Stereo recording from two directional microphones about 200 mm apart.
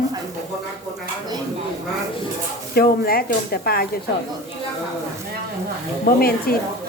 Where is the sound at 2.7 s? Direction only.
50° left (ahead or behind).